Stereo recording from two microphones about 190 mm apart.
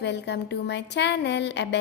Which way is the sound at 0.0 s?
65° left (ahead or behind).